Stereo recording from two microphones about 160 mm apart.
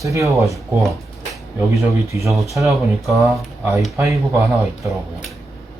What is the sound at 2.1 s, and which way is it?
Speech, 20° right (ahead or behind).